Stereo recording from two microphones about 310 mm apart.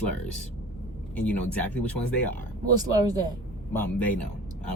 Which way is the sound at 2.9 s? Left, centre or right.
Centre.